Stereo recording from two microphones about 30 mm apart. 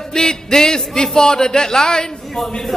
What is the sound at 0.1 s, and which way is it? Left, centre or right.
Speech, left.